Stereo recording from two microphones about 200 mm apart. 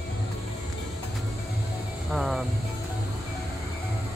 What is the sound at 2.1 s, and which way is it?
Speech, centre (ahead or behind).